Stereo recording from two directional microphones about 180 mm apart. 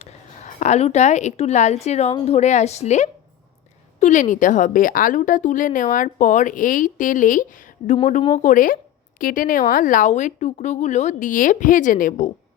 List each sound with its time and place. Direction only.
0.0 s a woman's voice: 40° left (ahead or behind)
7.9 s a woman's voice: 30° left (ahead or behind)
8.4 s speech: 45° left (ahead or behind)